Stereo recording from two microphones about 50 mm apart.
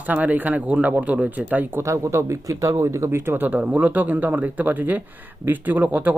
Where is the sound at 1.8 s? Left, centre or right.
Right.